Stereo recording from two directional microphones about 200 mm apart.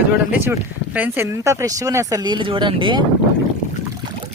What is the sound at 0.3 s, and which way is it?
Speech, 10° right (ahead or behind).